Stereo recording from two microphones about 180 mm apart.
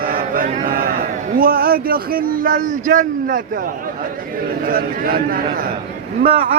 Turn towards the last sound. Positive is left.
turn(degrees=-35)  # may be behind; listen again after turning